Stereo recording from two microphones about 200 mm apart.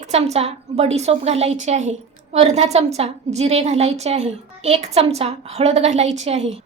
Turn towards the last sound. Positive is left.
turn(degrees=-35)  # may be behind; listen again after turning